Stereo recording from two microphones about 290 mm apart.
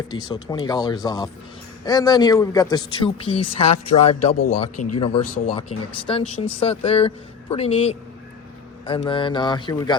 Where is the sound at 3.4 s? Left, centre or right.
Left.